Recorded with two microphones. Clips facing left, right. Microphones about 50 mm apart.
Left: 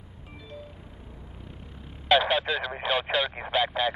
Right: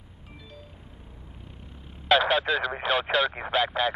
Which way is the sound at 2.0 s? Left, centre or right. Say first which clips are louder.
Right 1 dB; centre.